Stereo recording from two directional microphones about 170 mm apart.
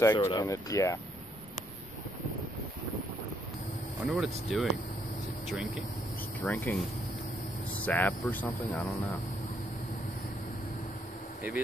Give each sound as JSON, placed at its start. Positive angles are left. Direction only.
{"t": 0.0, "sound": "speech", "side_deg": 20}
{"t": 4.1, "sound": "speech", "side_deg": 0}
{"t": 6.4, "sound": "speech", "side_deg": 10}
{"t": 7.8, "sound": "speech", "side_deg": 10}